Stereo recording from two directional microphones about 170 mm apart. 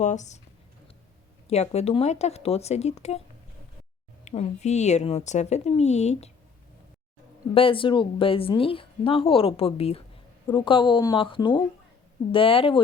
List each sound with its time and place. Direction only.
0.0 s speech: 45° left (ahead or behind)
1.5 s a woman's voice: 40° left (ahead or behind)
4.3 s a woman's voice: 40° left (ahead or behind)
7.5 s a woman's voice: 30° left (ahead or behind)